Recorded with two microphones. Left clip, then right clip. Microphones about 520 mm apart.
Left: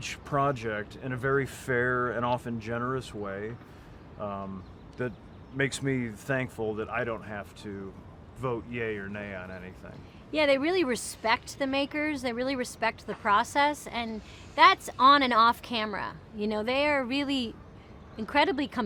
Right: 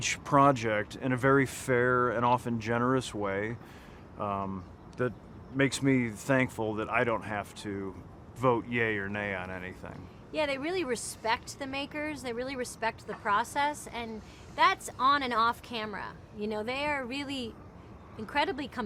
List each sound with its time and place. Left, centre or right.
0.0 s speech: centre
10.3 s speech: left